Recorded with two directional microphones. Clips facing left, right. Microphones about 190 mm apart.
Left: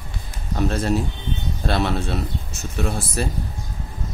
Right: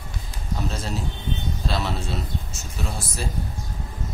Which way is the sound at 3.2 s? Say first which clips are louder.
Left 6 dB; 60° left (ahead or behind).